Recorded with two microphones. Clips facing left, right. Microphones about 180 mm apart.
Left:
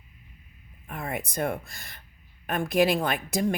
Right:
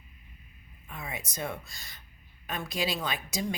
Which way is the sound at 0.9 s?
55° left (ahead or behind).